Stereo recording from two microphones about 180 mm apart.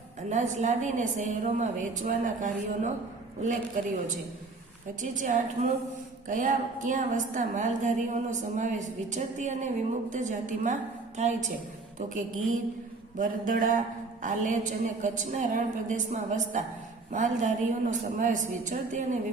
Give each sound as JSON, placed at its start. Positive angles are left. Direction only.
{"t": 0.3, "sound": "a woman's voice", "side_deg": -45}
{"t": 4.9, "sound": "a woman's voice", "side_deg": -45}
{"t": 6.2, "sound": "a woman's voice", "side_deg": -45}